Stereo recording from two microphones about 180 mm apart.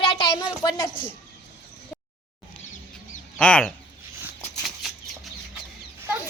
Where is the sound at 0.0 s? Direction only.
30° left (ahead or behind).